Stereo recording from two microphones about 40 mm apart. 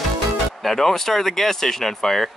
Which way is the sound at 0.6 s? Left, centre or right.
Centre.